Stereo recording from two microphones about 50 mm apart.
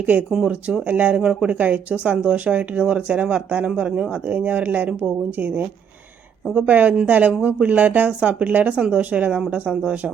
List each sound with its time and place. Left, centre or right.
0.0 s speech: right
0.4 s speech: centre
0.9 s speech: right
1.2 s speech: centre
1.5 s speech: right
6.7 s speech: right